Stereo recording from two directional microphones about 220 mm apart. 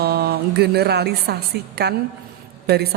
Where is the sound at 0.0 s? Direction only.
45° right (ahead or behind).